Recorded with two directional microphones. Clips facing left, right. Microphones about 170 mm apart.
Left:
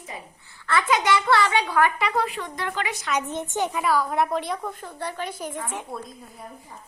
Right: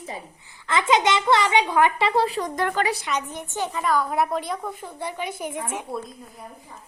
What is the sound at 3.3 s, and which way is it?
Speech, 20° left (ahead or behind).